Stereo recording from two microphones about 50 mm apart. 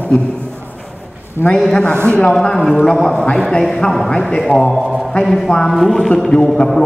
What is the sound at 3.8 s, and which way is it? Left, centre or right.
Speech, left.